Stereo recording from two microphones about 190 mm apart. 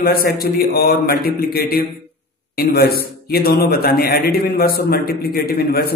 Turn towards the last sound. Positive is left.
turn(degrees=50)  # may be behind; listen again after turning